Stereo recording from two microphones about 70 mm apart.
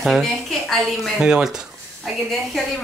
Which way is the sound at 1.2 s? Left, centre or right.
Centre.